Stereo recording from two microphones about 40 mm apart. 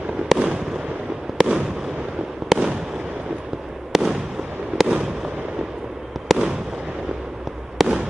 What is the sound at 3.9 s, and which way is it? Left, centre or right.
Fireworks, centre.